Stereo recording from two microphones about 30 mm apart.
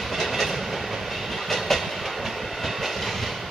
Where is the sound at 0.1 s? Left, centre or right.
Centre.